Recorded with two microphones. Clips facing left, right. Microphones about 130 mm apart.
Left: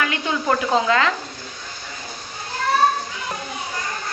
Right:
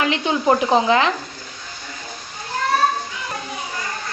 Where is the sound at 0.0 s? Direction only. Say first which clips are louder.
Right 4 dB; 20° right (ahead or behind).